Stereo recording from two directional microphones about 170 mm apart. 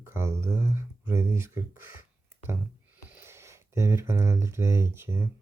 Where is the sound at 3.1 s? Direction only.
15° right (ahead or behind).